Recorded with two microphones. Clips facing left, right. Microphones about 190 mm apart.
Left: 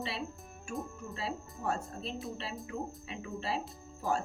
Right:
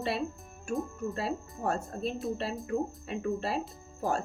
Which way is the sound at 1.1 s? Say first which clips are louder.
Right 5 dB; 50° right (ahead or behind).